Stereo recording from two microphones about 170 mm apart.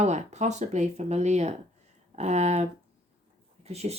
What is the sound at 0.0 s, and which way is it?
Speech, 40° right (ahead or behind).